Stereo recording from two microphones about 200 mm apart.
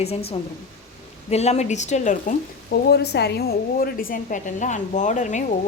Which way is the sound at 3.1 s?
55° left (ahead or behind).